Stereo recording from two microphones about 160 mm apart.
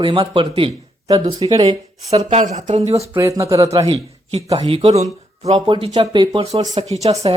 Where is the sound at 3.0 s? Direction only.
20° right (ahead or behind).